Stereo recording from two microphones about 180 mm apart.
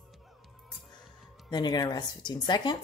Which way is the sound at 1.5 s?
20° left (ahead or behind).